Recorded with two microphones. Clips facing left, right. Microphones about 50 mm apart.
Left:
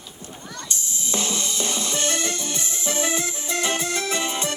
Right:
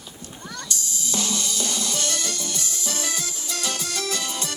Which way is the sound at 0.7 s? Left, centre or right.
Left.